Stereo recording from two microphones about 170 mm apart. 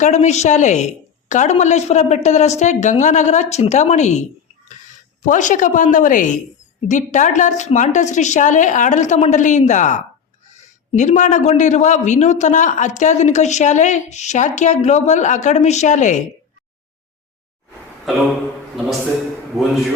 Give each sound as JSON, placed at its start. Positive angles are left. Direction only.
{"t": 0.0, "sound": "speech", "side_deg": 40}